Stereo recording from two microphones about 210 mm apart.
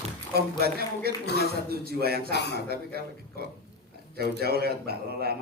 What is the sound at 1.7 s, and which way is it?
A man's voice, 45° right (ahead or behind).